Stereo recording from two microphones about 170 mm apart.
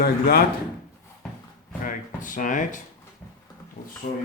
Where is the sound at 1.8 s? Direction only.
50° left (ahead or behind).